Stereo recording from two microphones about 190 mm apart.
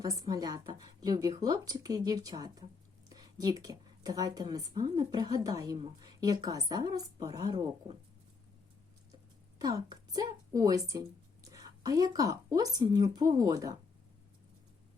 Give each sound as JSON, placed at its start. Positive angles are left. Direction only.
{"t": 0.0, "sound": "a woman's voice", "side_deg": -20}
{"t": 9.6, "sound": "a woman's voice", "side_deg": -20}